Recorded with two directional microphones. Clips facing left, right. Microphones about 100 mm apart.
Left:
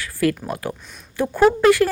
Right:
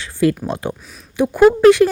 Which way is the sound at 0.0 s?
25° right (ahead or behind).